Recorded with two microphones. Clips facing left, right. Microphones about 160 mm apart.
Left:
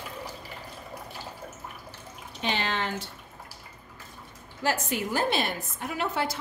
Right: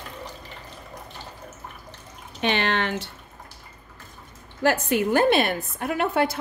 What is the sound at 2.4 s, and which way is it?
Speech, 70° right (ahead or behind).